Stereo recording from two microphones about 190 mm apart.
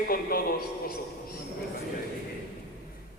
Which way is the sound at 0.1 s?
50° left (ahead or behind).